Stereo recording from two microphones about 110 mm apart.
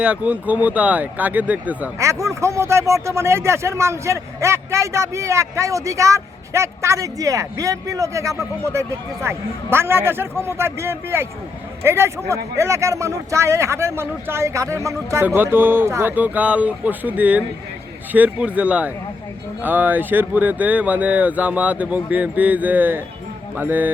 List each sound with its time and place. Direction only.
0.0 s speech: 10° right (ahead or behind)
2.0 s speech: 30° right (ahead or behind)